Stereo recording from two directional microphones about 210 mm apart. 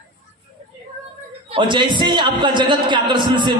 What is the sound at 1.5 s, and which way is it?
A man's voice, 20° right (ahead or behind).